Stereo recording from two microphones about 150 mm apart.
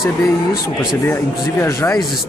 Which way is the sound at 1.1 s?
15° left (ahead or behind).